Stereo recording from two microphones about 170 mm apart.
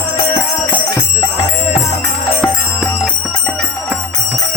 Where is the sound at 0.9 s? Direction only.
20° left (ahead or behind).